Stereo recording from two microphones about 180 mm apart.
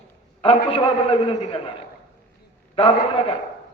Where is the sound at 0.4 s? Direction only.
30° left (ahead or behind).